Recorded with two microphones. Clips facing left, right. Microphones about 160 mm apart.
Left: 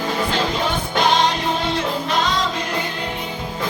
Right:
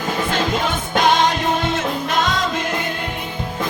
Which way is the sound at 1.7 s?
50° right (ahead or behind).